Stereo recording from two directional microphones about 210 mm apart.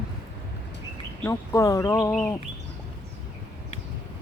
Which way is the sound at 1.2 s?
15° left (ahead or behind).